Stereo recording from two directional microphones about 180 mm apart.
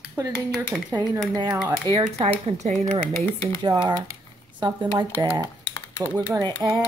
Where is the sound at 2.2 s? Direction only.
35° right (ahead or behind).